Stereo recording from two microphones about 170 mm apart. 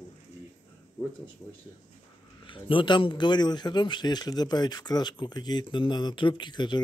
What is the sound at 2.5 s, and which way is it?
Speech, 30° left (ahead or behind).